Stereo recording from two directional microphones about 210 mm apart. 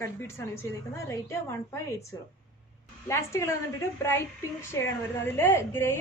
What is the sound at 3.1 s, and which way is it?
A woman's voice, 15° left (ahead or behind).